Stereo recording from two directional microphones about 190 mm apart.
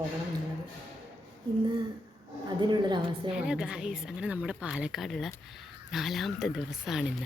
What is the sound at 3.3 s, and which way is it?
A woman's voice, 5° right (ahead or behind).